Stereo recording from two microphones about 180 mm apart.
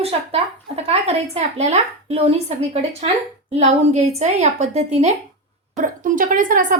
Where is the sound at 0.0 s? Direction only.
35° right (ahead or behind).